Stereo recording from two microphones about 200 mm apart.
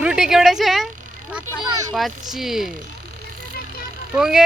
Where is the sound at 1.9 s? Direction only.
Centre (ahead or behind).